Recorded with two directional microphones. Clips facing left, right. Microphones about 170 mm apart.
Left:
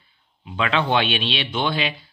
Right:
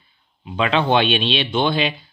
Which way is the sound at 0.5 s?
25° right (ahead or behind).